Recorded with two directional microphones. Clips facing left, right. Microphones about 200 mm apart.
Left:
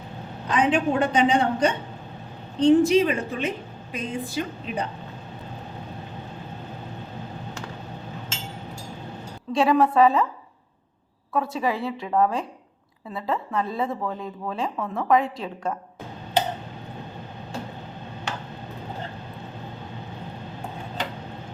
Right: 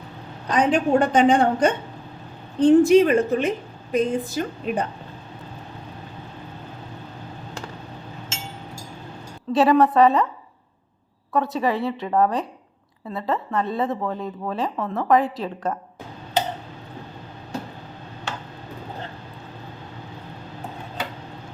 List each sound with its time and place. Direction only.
0.5 s a woman's voice: 40° right (ahead or behind)
9.5 s a woman's voice: centre (ahead or behind)
11.3 s a woman's voice: centre (ahead or behind)